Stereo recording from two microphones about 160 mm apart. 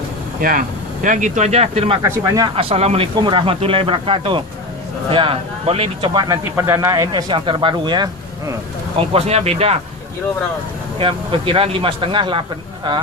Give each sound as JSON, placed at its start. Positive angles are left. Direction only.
{"t": 0.4, "sound": "speech", "side_deg": -65}
{"t": 1.0, "sound": "speech", "side_deg": -50}
{"t": 2.0, "sound": "speech", "side_deg": -20}
{"t": 2.6, "sound": "speech", "side_deg": -40}
{"t": 6.1, "sound": "speech", "side_deg": -20}
{"t": 9.0, "sound": "speech", "side_deg": -40}
{"t": 11.0, "sound": "speech", "side_deg": -35}